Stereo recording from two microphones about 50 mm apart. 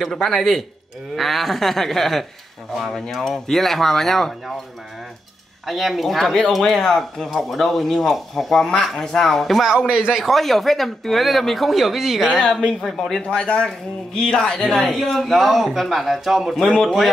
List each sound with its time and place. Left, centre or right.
0.1 s speech: centre
5.7 s speech: centre
9.8 s speech: centre
10.1 s speech: centre
12.4 s speech: left
12.8 s speech: centre
13.2 s speech: left; by 16.5 s centre
16.5 s speech: centre